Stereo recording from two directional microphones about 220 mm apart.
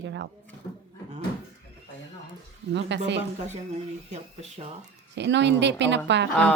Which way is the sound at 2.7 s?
50° right (ahead or behind).